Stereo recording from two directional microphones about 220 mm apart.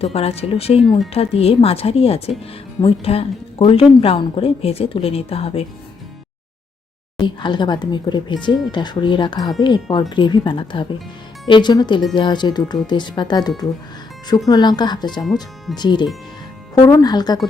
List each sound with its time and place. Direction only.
0.0 s a woman's voice: 25° left (ahead or behind)
0.8 s speech: centre (ahead or behind)
1.1 s a woman's voice: 25° left (ahead or behind)
7.2 s a woman's voice: 20° left (ahead or behind)
15.2 s speech: centre (ahead or behind)
15.7 s a woman's voice: 20° left (ahead or behind)